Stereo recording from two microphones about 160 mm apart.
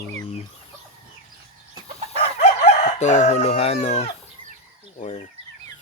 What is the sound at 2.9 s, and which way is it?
Speech, 45° left (ahead or behind).